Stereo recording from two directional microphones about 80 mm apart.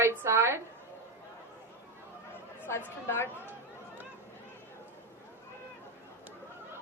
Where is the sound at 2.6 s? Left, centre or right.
Left.